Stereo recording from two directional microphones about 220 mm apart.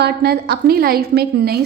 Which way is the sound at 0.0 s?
45° right (ahead or behind).